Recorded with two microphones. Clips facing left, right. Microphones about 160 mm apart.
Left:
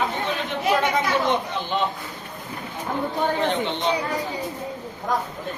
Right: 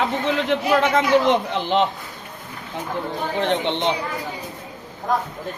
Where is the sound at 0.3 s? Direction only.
90° right.